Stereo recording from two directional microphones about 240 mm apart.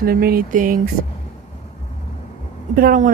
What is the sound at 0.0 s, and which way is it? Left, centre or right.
Speech, right.